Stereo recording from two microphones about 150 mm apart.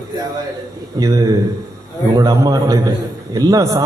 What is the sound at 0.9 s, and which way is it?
A man's voice, 25° right (ahead or behind).